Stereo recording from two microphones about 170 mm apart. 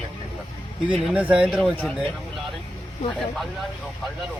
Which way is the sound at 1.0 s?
5° right (ahead or behind).